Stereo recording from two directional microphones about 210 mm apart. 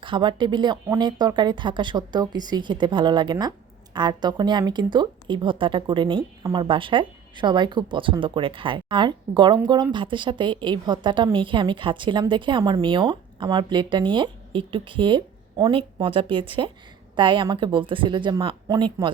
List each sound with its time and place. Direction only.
0.0 s a woman's voice: 25° right (ahead or behind)